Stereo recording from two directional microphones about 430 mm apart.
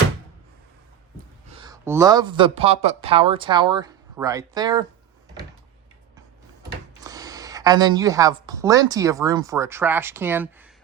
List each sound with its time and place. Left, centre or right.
1.5 s speech: centre
7.0 s speech: centre